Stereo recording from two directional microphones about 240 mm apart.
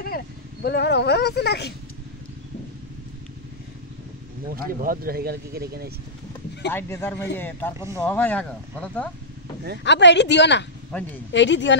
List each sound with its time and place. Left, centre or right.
0.0 s speech: left
4.8 s speech: right
6.7 s a man's voice: centre
9.8 s speech: left
10.9 s speech: centre
11.3 s speech: left